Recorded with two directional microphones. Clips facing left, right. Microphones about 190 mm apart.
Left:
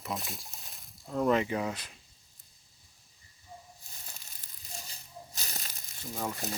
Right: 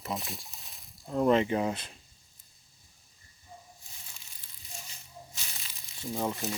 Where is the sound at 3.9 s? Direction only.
40° left (ahead or behind).